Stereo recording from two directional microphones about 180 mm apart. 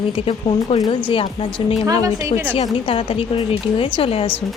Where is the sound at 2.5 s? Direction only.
30° left (ahead or behind).